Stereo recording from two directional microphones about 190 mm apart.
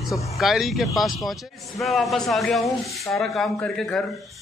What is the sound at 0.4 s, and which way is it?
Speech, centre (ahead or behind).